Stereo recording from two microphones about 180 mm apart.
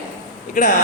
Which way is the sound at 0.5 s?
45° left (ahead or behind).